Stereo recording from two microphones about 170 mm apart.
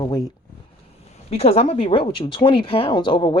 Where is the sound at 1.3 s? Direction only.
35° left (ahead or behind).